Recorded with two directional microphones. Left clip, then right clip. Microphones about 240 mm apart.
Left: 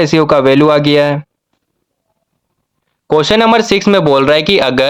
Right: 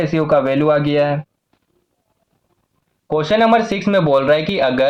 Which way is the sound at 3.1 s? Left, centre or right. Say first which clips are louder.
Left 4 dB; left.